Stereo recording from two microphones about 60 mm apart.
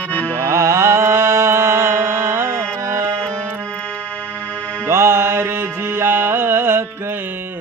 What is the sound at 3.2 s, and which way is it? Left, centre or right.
Music, centre.